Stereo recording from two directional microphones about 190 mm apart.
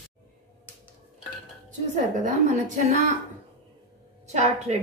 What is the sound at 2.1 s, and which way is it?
A woman's voice, 40° right (ahead or behind).